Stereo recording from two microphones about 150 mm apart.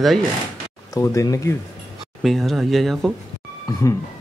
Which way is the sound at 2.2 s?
Centre (ahead or behind).